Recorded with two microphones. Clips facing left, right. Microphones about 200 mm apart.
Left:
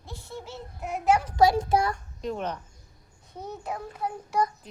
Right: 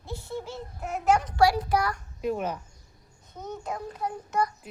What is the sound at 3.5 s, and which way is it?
Child singing, 5° left (ahead or behind).